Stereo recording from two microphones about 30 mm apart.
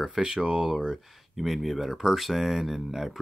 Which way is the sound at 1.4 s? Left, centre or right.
Centre.